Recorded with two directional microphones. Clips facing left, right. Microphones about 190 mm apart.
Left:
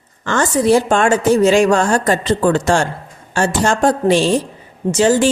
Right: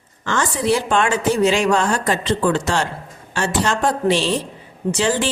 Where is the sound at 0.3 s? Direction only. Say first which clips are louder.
Left 5 dB; 45° left (ahead or behind).